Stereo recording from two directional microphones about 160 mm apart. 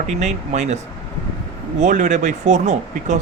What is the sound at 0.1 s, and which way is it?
Speech, 45° right (ahead or behind).